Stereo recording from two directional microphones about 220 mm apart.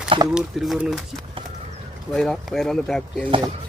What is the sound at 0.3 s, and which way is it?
Speech, centre (ahead or behind).